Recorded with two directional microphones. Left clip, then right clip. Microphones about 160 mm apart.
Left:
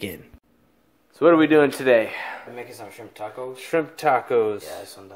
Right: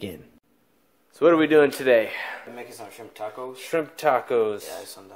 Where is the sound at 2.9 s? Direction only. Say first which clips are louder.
Left 1 dB; 45° right (ahead or behind).